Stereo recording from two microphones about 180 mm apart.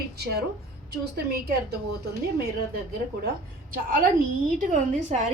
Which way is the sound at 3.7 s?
50° right (ahead or behind).